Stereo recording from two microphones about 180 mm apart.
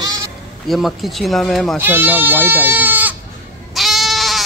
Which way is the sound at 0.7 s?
Centre (ahead or behind).